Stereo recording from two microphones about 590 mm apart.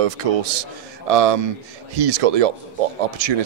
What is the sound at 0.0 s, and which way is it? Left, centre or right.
Speech, right.